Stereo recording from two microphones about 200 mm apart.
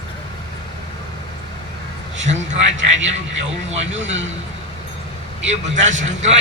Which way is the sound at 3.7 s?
35° right (ahead or behind).